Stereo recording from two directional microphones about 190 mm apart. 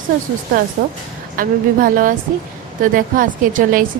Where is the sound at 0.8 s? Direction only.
45° right (ahead or behind).